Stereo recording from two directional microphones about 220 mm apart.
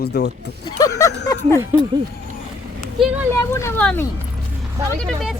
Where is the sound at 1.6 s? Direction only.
10° right (ahead or behind).